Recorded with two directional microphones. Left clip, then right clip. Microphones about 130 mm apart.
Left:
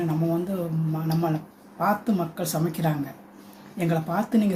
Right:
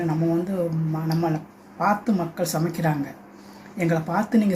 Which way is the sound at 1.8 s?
Centre (ahead or behind).